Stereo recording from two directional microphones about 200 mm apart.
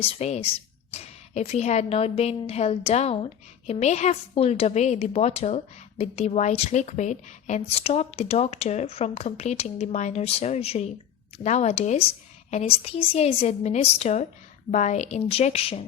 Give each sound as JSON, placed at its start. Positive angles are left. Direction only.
{"t": 0.0, "sound": "a woman's voice", "side_deg": 35}